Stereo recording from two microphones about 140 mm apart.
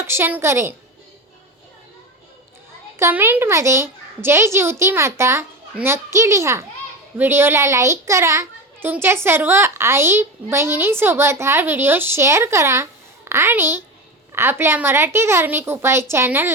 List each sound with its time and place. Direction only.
0.0 s a child's voice: 15° right (ahead or behind)
3.0 s a child's voice: 15° right (ahead or behind)